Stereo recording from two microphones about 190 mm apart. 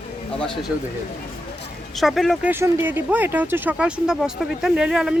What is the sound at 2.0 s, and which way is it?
Speech, centre (ahead or behind).